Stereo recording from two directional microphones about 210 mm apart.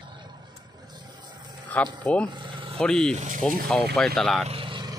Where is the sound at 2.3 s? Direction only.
20° right (ahead or behind).